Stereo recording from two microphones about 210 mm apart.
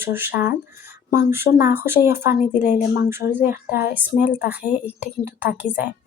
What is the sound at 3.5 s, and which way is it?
Speech, 50° left (ahead or behind).